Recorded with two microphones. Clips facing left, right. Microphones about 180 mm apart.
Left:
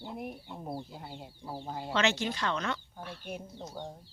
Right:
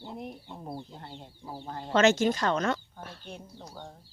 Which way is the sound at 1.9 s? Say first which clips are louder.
Right 8 dB; 45° right (ahead or behind).